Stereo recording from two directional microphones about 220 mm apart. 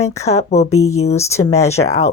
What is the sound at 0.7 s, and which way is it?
Speech, 80° left.